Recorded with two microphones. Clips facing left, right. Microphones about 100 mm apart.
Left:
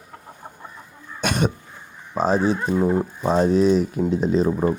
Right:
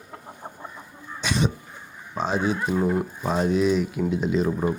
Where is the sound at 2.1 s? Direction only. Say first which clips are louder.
Left 5 dB; 40° left (ahead or behind).